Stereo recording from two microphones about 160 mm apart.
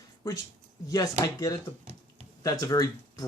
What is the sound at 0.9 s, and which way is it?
Speech, 25° left (ahead or behind).